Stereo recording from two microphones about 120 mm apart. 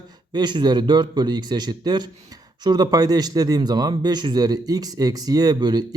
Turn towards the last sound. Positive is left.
turn(degrees=-35)  # may be behind; listen again after turning